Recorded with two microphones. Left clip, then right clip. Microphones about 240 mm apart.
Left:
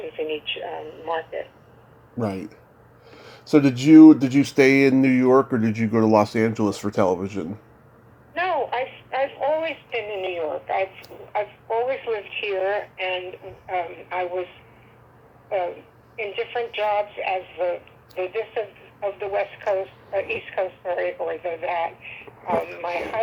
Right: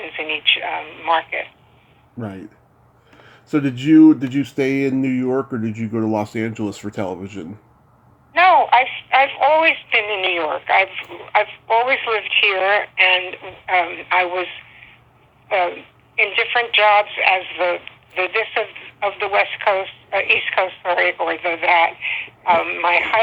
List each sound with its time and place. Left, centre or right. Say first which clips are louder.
0.1 s radio: right 4 dB; right
2.1 s speech: left 4 dB; centre
8.3 s telephone: right 12 dB; right
9.0 s telephone: right 6 dB; centre
13.4 s a woman's voice: right 9 dB; centre